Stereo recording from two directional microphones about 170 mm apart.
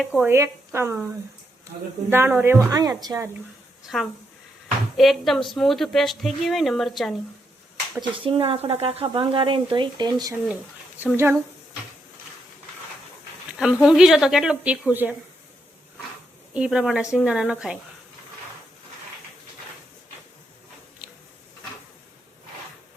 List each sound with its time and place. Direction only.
0.0 s a woman's voice: 5° right (ahead or behind)
3.8 s a woman's voice: centre (ahead or behind)
8.1 s speech: 30° right (ahead or behind)
11.0 s a woman's voice: 15° right (ahead or behind)
13.8 s a woman's voice: 5° right (ahead or behind)
16.6 s a woman's voice: 5° right (ahead or behind)